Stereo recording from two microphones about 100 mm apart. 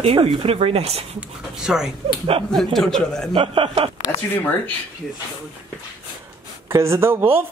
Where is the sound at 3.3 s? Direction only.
60° right (ahead or behind).